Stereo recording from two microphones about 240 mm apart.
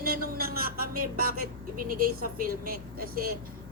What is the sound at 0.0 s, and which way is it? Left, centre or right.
A man's voice, right.